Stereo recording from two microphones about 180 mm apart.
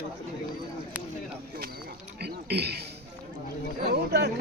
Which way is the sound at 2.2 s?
65° right (ahead or behind).